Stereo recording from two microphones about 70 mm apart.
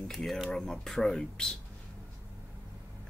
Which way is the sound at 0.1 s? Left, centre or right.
Centre.